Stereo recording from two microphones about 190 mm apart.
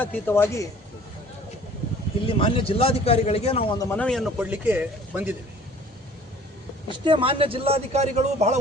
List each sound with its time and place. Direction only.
0.0 s a man's voice: 10° left (ahead or behind)
2.2 s a man's voice: 30° left (ahead or behind)
3.8 s a man's voice: 10° left (ahead or behind); by 5.4 s 10° right (ahead or behind)
6.9 s a man's voice: 25° right (ahead or behind)